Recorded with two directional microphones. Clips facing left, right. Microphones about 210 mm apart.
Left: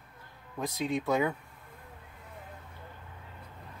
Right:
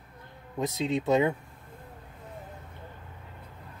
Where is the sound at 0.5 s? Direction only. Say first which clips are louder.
Right 3 dB; 25° right (ahead or behind).